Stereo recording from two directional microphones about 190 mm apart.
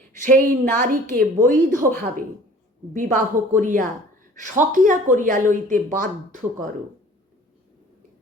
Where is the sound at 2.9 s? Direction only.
40° right (ahead or behind).